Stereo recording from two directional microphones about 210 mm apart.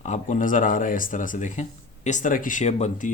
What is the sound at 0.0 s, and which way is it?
Speech, 35° left (ahead or behind).